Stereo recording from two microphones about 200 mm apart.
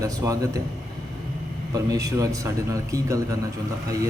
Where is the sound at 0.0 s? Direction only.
15° right (ahead or behind).